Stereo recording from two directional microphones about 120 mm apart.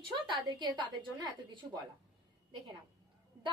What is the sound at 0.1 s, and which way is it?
A woman's voice, 35° right (ahead or behind).